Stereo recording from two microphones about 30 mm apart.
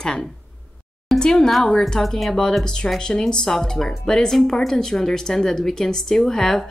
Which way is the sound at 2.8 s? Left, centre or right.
Left.